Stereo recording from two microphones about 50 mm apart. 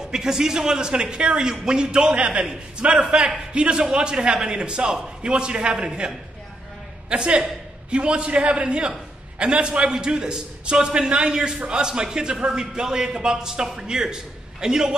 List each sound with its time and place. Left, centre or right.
0.1 s a man's voice: centre